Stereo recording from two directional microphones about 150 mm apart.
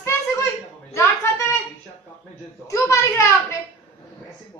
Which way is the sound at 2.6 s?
20° left (ahead or behind).